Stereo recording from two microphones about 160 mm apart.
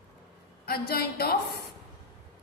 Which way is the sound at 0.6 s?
70° left (ahead or behind).